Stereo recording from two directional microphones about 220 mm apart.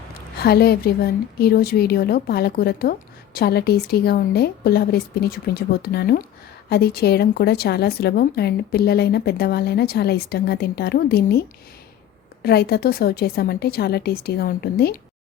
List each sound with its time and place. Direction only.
0.3 s a woman's voice: 45° left (ahead or behind)